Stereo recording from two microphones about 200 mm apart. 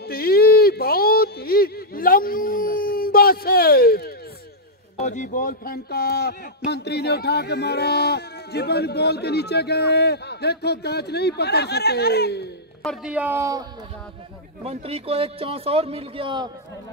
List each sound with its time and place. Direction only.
0.0 s a sound: 50° left (ahead or behind)
4.9 s speech: 35° left (ahead or behind); by 12.4 s 55° left (ahead or behind)
12.8 s speech: 5° right (ahead or behind)
14.6 s a man's voice: 30° right (ahead or behind)